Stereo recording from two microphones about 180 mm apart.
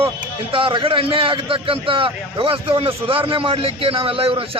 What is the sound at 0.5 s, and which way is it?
A man's voice, 30° right (ahead or behind).